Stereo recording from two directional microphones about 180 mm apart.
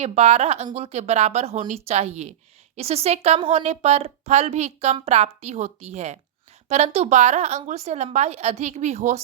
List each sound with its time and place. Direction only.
0.0 s a woman's voice: 35° right (ahead or behind)